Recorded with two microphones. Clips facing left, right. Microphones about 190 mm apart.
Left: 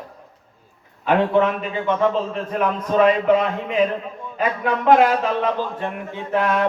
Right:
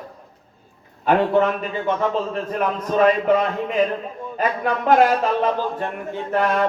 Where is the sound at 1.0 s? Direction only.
45° right (ahead or behind).